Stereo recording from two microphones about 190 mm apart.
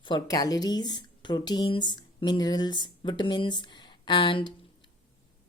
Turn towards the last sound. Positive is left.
turn(degrees=25)  # may be behind; listen again after turning